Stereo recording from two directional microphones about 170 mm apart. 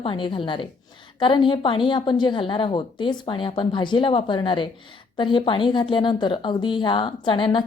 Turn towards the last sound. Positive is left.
turn(degrees=30)  # may be behind; listen again after turning